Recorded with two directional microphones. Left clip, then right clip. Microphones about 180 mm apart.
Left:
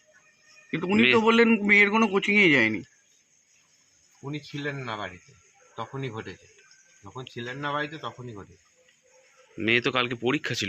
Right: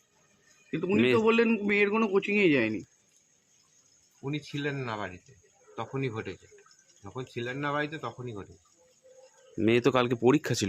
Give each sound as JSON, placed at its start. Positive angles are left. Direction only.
{"t": 0.7, "sound": "a man's voice", "side_deg": 40}
{"t": 4.3, "sound": "a man's voice", "side_deg": -30}
{"t": 7.2, "sound": "speech", "side_deg": -40}
{"t": 7.9, "sound": "speech", "side_deg": -10}
{"t": 9.6, "sound": "speech", "side_deg": -45}